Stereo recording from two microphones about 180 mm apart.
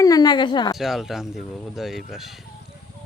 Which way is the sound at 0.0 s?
20° left (ahead or behind).